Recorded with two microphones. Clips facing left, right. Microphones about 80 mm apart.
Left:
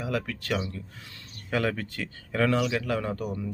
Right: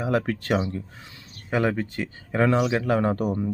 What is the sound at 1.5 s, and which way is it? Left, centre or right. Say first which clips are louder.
A man's voice: right 4 dB; right.